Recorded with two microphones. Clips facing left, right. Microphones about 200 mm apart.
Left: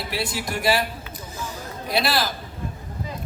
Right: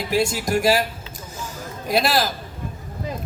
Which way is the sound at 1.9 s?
45° right (ahead or behind).